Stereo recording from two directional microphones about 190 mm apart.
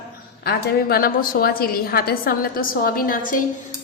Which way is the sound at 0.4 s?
55° left (ahead or behind).